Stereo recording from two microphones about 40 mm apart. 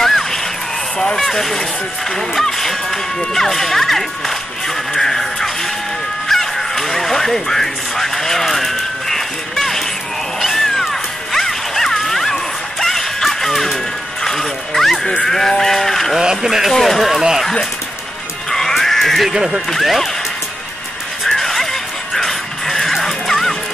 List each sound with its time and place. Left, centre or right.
0.0 s a sound: centre
1.2 s speech: centre
4.9 s music: centre
6.2 s crow: centre
10.8 s music: centre
15.2 s sheep: centre
16.2 s speech: centre
16.7 s speech: centre
17.1 s speech: centre
18.5 s music: centre
19.3 s speech: centre
21.3 s music: centre